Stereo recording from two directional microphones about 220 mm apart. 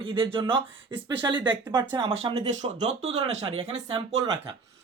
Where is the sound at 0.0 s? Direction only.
20° right (ahead or behind).